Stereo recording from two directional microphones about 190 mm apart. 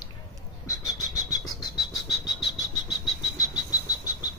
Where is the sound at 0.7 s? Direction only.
20° left (ahead or behind).